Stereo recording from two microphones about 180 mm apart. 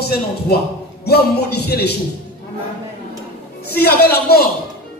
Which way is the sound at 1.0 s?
60° left (ahead or behind).